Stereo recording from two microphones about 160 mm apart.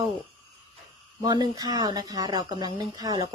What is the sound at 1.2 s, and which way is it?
Speech, 25° right (ahead or behind).